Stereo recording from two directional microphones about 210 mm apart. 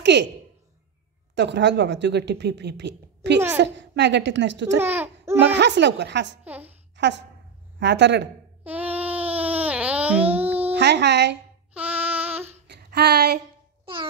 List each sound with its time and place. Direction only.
0.0 s a woman's voice: 55° right (ahead or behind)
1.3 s a woman's voice: 55° right (ahead or behind)
3.3 s a child's voice: 10° right (ahead or behind)
3.7 s a woman's voice: 55° right (ahead or behind)
4.7 s speech: 10° right (ahead or behind)
5.4 s a woman's voice: 55° right (ahead or behind)
6.4 s a woman's voice: 10° right (ahead or behind)
7.0 s a woman's voice: 55° right (ahead or behind)
8.6 s babbling: 5° right (ahead or behind)
10.7 s speech: 55° right (ahead or behind)
11.7 s babbling: 5° right (ahead or behind)
12.6 s a sound: 50° right (ahead or behind)